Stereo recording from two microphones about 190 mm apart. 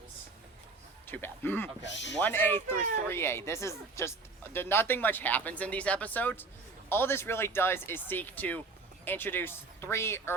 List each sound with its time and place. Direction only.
1.0 s speech: 10° left (ahead or behind)